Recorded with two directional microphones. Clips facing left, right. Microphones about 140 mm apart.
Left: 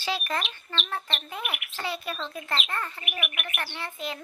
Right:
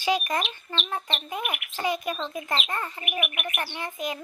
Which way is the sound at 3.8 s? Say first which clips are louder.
Right 3 dB; 15° right (ahead or behind).